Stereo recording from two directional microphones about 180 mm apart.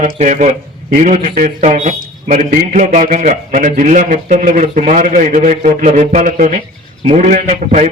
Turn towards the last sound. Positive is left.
turn(degrees=-40)  # may be behind; listen again after turning